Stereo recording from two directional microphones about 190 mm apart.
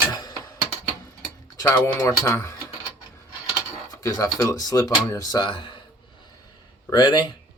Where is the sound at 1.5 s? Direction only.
10° left (ahead or behind).